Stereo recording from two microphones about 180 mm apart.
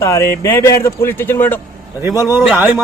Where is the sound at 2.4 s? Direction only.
5° right (ahead or behind).